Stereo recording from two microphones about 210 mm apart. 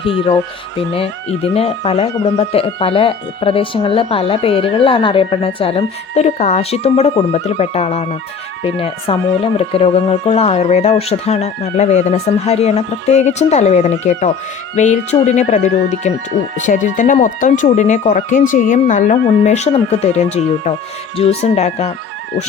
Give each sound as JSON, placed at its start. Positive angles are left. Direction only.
{"t": 0.0, "sound": "speech", "side_deg": 25}